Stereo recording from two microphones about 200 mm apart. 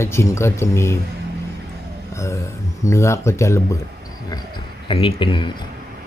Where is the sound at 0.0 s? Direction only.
15° left (ahead or behind).